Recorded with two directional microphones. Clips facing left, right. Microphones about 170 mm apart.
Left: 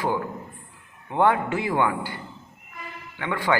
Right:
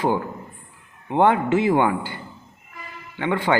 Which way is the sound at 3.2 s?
25° right (ahead or behind).